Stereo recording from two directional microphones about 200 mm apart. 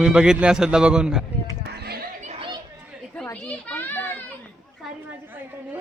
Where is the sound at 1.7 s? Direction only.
55° right (ahead or behind).